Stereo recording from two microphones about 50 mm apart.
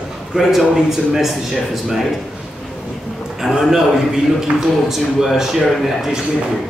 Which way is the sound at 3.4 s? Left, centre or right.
Centre.